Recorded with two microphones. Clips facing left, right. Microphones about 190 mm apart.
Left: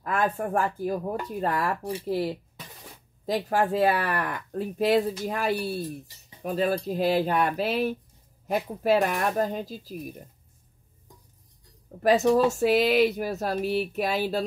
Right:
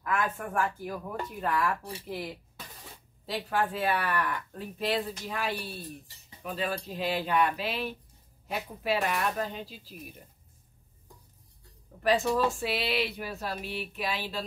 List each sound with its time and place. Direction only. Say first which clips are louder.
0.4 s speech: left 5 dB; 35° left (ahead or behind)
12.0 s speech: left 6 dB; 40° left (ahead or behind)